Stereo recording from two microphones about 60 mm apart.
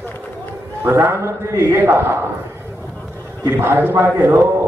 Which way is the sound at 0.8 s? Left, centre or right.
Right.